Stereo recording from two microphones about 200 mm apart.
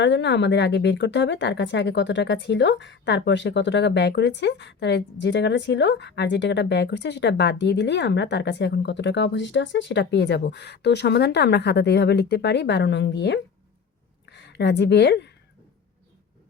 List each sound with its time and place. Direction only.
0.0 s a woman's voice: 60° left (ahead or behind)